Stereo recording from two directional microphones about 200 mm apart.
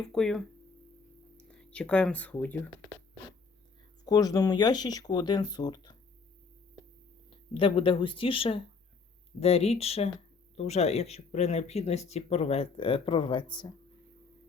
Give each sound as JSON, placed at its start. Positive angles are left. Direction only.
{"t": 0.0, "sound": "speech", "side_deg": 5}
{"t": 1.5, "sound": "speech", "side_deg": 5}
{"t": 4.0, "sound": "speech", "side_deg": 20}
{"t": 7.3, "sound": "speech", "side_deg": 25}